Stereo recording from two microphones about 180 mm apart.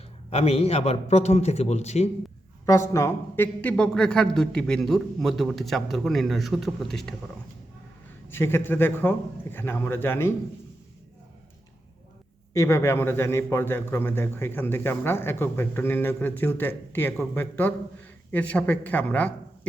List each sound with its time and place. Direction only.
0.3 s a man's voice: 35° left (ahead or behind)
2.9 s a man's voice: 15° left (ahead or behind)
8.3 s a man's voice: 10° left (ahead or behind)
12.5 s a man's voice: 15° left (ahead or behind)